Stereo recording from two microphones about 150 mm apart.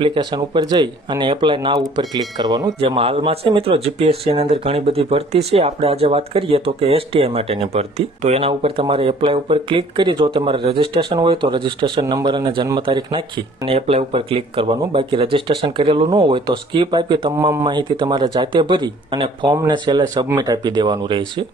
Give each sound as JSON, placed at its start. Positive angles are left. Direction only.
{"t": 0.0, "sound": "speech", "side_deg": -30}
{"t": 2.8, "sound": "speech", "side_deg": -40}